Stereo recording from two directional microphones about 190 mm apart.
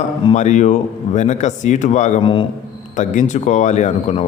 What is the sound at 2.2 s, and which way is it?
Speech, 25° left (ahead or behind).